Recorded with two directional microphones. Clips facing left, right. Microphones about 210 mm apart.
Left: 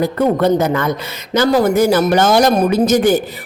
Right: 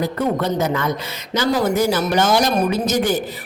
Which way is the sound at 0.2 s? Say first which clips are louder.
Left 7 dB; 55° left (ahead or behind).